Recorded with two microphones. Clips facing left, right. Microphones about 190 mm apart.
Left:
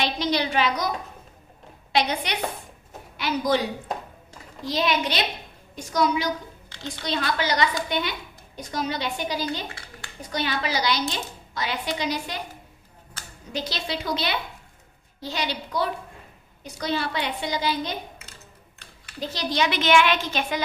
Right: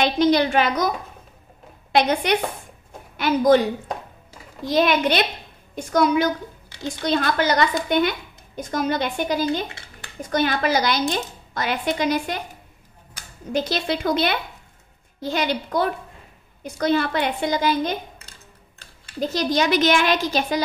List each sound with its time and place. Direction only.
0.0 s a woman's voice: 50° right (ahead or behind)
4.6 s a woman's voice: 55° right (ahead or behind)
13.5 s a woman's voice: 50° right (ahead or behind)
19.1 s a child's voice: 45° right (ahead or behind)